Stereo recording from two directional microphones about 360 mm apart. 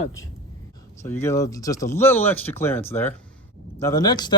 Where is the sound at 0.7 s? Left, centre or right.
Centre.